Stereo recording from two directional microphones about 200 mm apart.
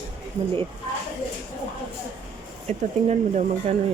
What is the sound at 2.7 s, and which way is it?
Speech, 35° right (ahead or behind).